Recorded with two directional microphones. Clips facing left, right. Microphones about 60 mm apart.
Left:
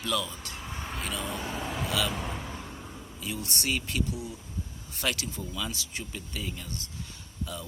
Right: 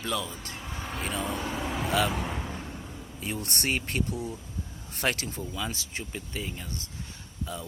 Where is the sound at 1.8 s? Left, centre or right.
Right.